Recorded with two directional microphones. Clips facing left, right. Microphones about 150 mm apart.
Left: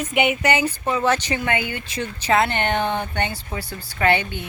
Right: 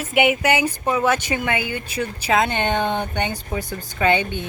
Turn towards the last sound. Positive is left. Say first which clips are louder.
# right 1 dB
turn(degrees=-20)  # may be behind; listen again after turning